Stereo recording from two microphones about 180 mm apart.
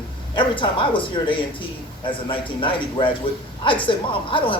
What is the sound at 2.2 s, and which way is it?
Speech, 30° left (ahead or behind).